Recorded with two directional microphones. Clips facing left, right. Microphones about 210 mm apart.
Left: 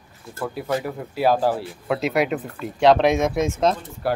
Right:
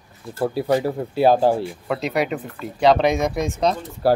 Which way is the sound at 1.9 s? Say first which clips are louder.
Left 2 dB; centre (ahead or behind).